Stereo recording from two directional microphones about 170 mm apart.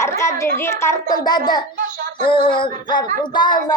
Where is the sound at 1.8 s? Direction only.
50° right (ahead or behind).